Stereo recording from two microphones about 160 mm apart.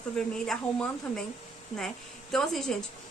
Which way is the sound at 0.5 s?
5° left (ahead or behind).